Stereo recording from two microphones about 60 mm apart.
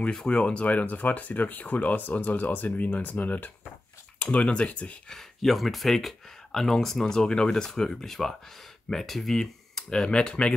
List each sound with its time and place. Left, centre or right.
0.1 s speech: centre
5.1 s speech: centre